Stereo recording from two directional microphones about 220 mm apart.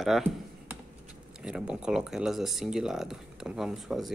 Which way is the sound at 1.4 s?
5° right (ahead or behind).